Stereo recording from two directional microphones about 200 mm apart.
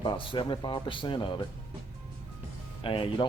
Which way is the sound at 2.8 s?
25° left (ahead or behind).